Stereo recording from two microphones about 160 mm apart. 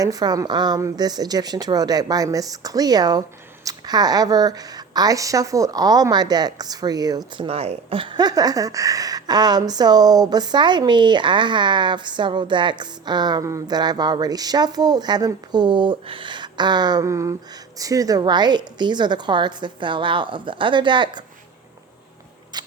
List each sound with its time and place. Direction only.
0.0 s speech: 25° right (ahead or behind)
7.4 s speech: 40° right (ahead or behind)
22.5 s biting: 25° right (ahead or behind)